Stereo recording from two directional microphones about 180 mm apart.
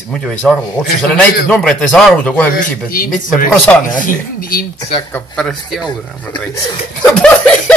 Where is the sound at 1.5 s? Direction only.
5° left (ahead or behind).